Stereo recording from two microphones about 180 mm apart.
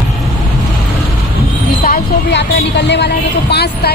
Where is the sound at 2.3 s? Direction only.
70° left (ahead or behind).